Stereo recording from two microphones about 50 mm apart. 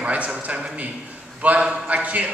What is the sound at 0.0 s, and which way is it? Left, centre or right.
Speech, right.